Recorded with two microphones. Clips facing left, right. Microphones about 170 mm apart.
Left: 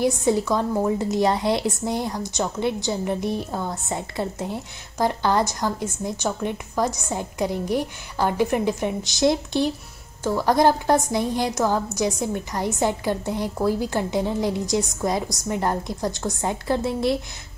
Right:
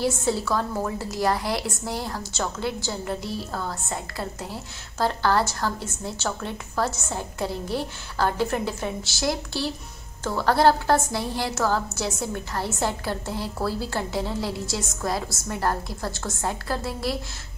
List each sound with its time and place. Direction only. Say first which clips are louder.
0.0 s a woman's voice: left 4 dB; 15° left (ahead or behind)